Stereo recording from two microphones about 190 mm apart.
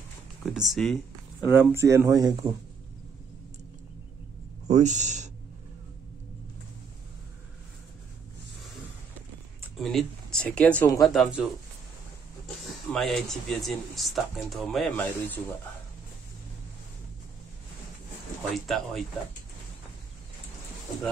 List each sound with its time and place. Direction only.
0.5 s speech: centre (ahead or behind)
1.5 s speech: 10° right (ahead or behind)
4.6 s speech: 40° right (ahead or behind)
9.8 s speech: centre (ahead or behind)
12.9 s speech: centre (ahead or behind)
18.5 s speech: centre (ahead or behind)